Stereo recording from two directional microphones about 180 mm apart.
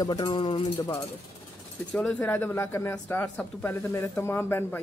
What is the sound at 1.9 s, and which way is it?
Speech, 5° left (ahead or behind).